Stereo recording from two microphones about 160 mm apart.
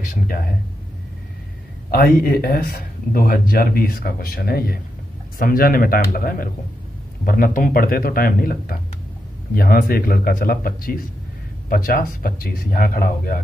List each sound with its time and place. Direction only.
0.0 s speech: 60° left (ahead or behind)
1.9 s speech: 70° left (ahead or behind)